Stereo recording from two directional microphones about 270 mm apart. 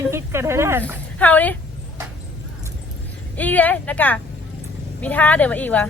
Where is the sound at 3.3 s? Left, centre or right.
Centre.